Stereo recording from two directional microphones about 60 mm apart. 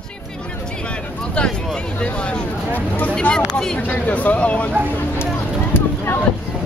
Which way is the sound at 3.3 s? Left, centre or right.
Centre.